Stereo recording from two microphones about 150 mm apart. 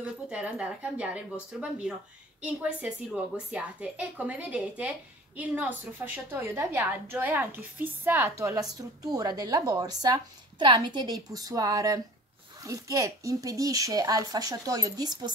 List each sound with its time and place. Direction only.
0.0 s a woman's voice: 10° right (ahead or behind); by 15.3 s 25° right (ahead or behind)